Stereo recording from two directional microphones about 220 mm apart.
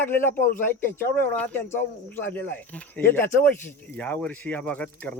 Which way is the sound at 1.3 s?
5° left (ahead or behind).